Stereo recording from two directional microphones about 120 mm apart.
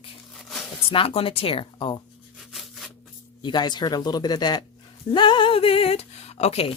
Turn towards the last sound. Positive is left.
turn(degrees=60)  # may be behind; listen again after turning